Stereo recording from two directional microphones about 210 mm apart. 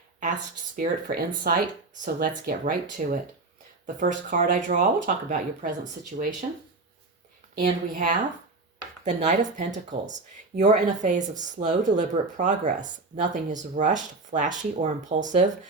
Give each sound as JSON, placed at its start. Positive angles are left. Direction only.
{"t": 0.8, "sound": "speech", "side_deg": -40}
{"t": 7.5, "sound": "speech", "side_deg": -40}